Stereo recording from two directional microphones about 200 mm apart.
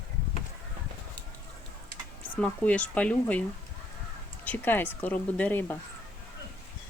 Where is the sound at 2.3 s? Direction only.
5° left (ahead or behind).